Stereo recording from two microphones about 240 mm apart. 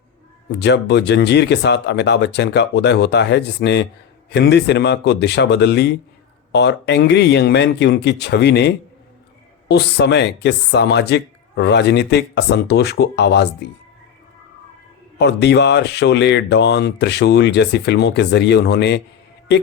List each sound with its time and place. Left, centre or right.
0.6 s speech: left
15.2 s speech: left